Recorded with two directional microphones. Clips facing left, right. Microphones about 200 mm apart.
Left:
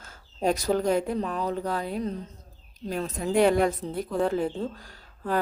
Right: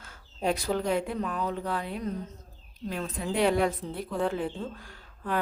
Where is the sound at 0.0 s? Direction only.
40° left (ahead or behind).